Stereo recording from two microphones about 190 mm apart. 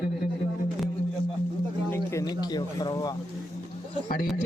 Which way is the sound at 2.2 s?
20° left (ahead or behind).